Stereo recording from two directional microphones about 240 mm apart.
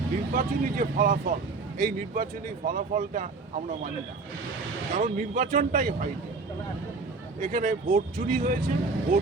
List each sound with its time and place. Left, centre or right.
0.3 s speech: right
4.9 s speech: right
7.3 s speech: right